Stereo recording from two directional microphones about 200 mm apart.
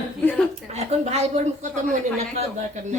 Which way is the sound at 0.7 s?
30° right (ahead or behind).